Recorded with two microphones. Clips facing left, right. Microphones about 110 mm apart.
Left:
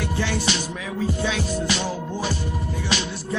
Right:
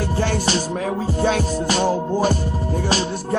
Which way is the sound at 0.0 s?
40° right (ahead or behind).